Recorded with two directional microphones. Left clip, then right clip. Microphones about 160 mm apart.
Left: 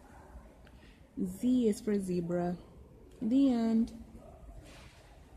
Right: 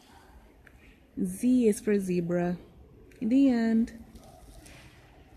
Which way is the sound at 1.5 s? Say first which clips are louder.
Right 6 dB; 25° right (ahead or behind).